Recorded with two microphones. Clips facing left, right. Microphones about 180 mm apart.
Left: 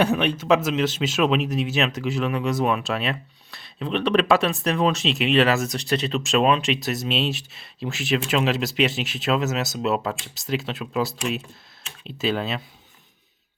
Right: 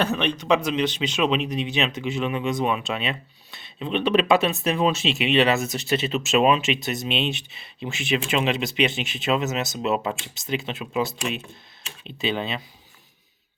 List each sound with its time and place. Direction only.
0.0 s speech: 10° left (ahead or behind)